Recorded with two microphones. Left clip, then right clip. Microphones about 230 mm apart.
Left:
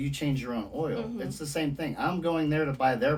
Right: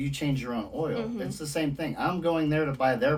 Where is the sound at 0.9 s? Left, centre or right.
Right.